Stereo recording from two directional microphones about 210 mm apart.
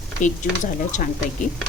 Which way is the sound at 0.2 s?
35° left (ahead or behind).